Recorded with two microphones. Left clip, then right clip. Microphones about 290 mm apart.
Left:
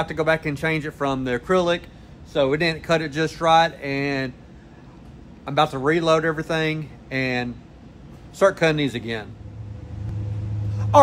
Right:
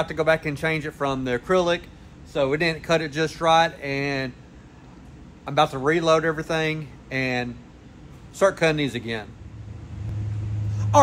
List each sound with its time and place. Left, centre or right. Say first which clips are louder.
0.0 s speech: even; centre
5.4 s speech: left 1 dB; centre